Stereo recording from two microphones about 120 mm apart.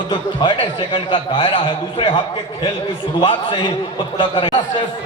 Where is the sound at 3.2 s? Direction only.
45° left (ahead or behind).